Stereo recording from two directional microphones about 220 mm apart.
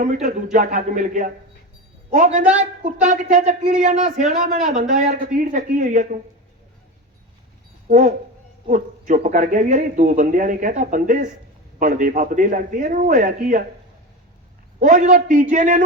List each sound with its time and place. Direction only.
0.0 s speech: 35° right (ahead or behind)
7.9 s speech: 35° right (ahead or behind)
14.8 s speech: 35° right (ahead or behind)